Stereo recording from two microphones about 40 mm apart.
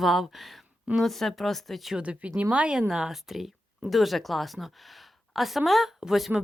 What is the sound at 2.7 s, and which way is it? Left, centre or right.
A woman's voice, centre.